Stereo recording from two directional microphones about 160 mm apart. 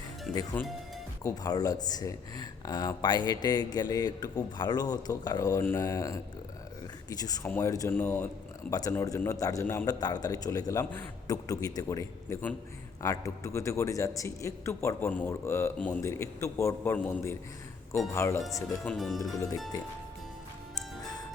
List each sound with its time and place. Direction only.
0.3 s speech: 10° left (ahead or behind)
1.2 s speech: 25° left (ahead or behind)
18.9 s speech: centre (ahead or behind)